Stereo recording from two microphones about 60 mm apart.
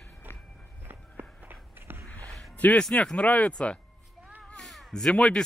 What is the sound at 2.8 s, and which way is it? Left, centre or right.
Speech, centre.